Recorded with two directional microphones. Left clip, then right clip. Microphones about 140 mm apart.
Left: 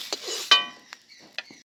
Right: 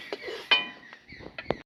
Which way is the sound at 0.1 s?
25° left (ahead or behind).